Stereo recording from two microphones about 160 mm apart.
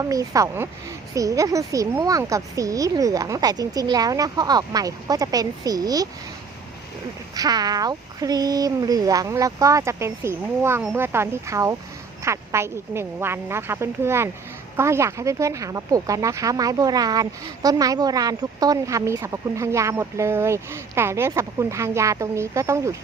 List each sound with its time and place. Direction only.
0.0 s speech: 20° right (ahead or behind)
7.3 s a woman's voice: 25° right (ahead or behind)